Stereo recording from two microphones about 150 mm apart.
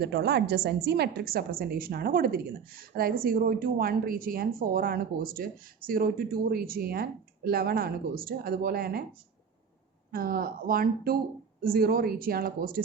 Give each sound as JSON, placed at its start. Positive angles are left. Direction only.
{"t": 0.0, "sound": "a woman's voice", "side_deg": -90}
{"t": 10.1, "sound": "a woman's voice", "side_deg": -75}